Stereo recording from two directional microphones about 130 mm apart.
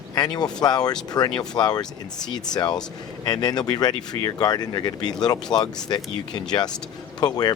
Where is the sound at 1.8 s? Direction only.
5° left (ahead or behind).